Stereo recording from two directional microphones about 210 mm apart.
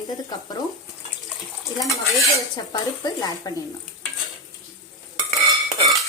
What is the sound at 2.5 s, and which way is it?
Speech, 20° left (ahead or behind).